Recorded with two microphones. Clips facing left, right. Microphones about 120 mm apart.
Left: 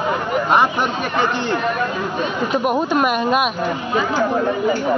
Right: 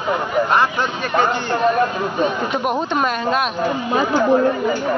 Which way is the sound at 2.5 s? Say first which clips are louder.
Left 2 dB; centre (ahead or behind).